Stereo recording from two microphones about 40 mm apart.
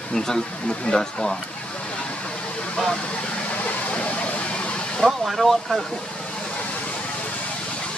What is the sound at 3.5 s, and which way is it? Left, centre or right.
Vehicle, left.